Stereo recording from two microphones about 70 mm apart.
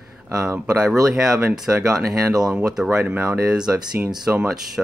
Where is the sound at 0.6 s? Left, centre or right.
Centre.